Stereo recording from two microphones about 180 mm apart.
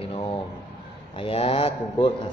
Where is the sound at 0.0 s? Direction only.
30° left (ahead or behind).